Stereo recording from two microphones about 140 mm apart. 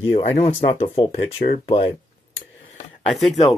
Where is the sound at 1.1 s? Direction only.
90° left.